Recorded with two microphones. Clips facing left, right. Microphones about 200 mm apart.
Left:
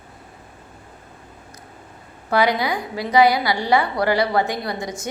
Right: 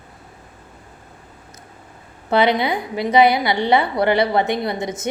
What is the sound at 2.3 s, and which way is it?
A woman's voice, 25° right (ahead or behind).